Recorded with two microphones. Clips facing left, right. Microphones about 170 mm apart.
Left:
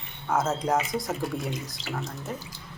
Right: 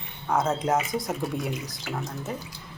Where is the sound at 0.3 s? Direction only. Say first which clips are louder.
Right 1 dB; centre (ahead or behind).